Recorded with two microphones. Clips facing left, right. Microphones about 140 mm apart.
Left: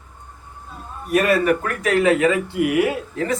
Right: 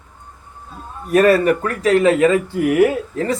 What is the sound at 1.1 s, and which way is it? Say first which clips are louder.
Speech: right 4 dB; 40° right (ahead or behind).